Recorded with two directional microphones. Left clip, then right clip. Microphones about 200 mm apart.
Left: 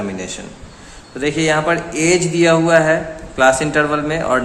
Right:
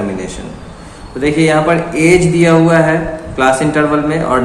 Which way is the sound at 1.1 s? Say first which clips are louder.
Right 5 dB; 35° left (ahead or behind).